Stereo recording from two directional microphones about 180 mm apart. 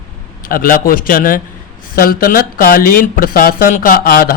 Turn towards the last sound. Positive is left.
turn(degrees=55)  # may be behind; listen again after turning